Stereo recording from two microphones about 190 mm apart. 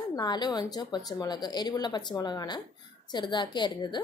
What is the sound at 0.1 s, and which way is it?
A woman's voice, 20° left (ahead or behind).